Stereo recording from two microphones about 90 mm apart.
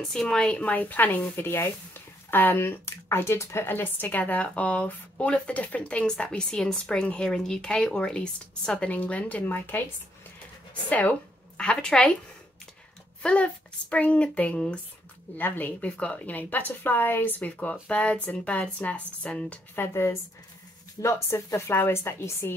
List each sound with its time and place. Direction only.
0.0 s speech: 5° left (ahead or behind); by 9.8 s 20° left (ahead or behind)
10.9 s a woman's voice: 15° left (ahead or behind)
13.2 s a woman's voice: 15° left (ahead or behind)
19.7 s a woman's voice: 30° left (ahead or behind)